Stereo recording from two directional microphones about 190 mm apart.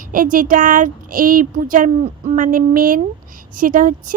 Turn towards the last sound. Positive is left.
turn(degrees=-45)  # may be behind; listen again after turning